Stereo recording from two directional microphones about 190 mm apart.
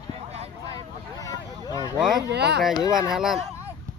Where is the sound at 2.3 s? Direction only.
60° right (ahead or behind).